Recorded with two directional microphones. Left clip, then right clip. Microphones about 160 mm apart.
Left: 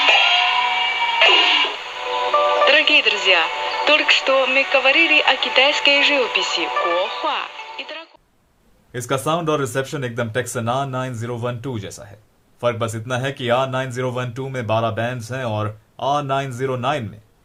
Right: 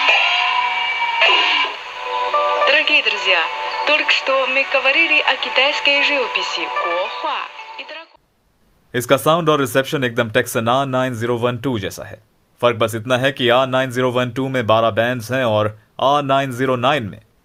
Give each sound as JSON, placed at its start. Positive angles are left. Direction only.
{"t": 0.0, "sound": "music", "side_deg": 20}
{"t": 8.9, "sound": "speech", "side_deg": -65}